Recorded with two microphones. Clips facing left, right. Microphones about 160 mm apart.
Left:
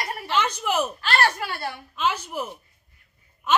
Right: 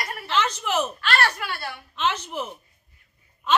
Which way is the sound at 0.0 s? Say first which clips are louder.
Left 2 dB; 25° left (ahead or behind).